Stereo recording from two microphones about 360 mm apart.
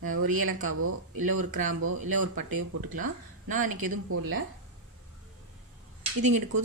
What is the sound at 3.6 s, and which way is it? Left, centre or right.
Speech, right.